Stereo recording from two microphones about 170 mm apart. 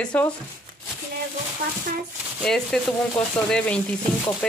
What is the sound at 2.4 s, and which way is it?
Speech, 5° left (ahead or behind).